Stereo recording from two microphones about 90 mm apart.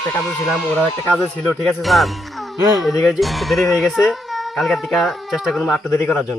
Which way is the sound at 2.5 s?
45° right (ahead or behind).